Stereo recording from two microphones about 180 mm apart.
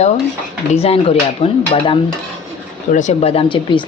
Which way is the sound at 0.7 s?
35° left (ahead or behind).